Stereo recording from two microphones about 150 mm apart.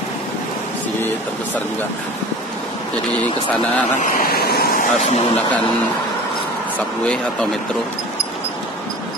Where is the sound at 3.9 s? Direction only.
80° left.